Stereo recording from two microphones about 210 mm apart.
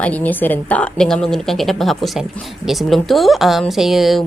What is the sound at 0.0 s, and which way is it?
Speech, 5° left (ahead or behind).